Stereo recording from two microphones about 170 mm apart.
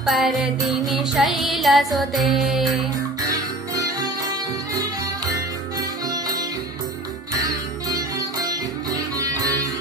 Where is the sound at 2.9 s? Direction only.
20° right (ahead or behind).